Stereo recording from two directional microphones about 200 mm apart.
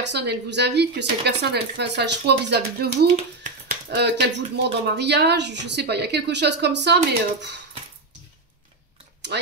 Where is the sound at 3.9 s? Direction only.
55° right (ahead or behind).